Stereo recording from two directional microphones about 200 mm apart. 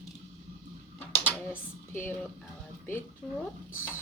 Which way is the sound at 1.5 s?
10° left (ahead or behind).